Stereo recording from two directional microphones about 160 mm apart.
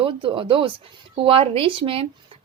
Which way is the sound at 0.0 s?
30° right (ahead or behind).